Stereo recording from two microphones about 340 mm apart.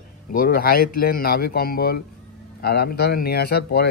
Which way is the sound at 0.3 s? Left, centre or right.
Left.